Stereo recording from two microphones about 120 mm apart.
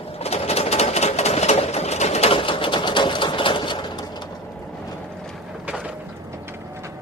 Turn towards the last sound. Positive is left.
turn(degrees=-10)  # may be behind; listen again after turning